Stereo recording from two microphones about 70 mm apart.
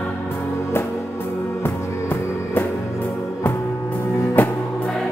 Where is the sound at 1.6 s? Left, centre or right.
Left.